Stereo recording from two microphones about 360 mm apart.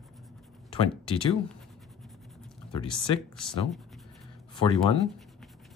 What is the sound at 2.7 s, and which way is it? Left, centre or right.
Speech, centre.